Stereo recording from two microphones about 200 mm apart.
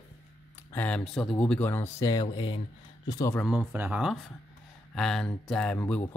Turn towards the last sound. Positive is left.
turn(degrees=10)  # may be behind; listen again after turning